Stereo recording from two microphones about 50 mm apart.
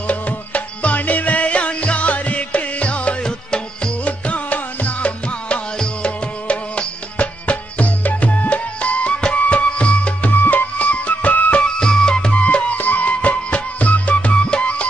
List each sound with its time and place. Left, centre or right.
0.0 s music: left
11.6 s music: centre
12.4 s music: left